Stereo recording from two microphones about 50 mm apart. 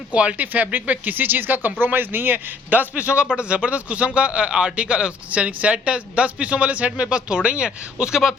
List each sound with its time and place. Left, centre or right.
0.1 s speech: right
2.9 s a man's voice: right